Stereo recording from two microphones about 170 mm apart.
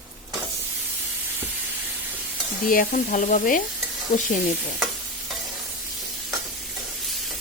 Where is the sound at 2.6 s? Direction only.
55° left (ahead or behind).